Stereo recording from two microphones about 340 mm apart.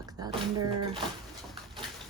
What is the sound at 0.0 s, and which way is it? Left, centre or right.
Speech, centre.